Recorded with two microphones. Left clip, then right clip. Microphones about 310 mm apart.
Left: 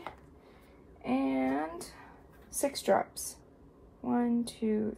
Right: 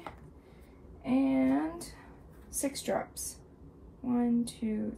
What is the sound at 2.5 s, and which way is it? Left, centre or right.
Speech, left.